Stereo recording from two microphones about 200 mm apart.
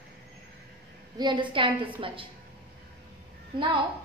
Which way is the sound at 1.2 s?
25° right (ahead or behind).